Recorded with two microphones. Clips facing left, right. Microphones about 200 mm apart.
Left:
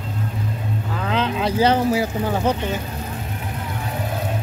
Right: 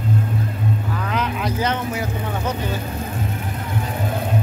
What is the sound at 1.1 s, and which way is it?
Speech, 30° left (ahead or behind).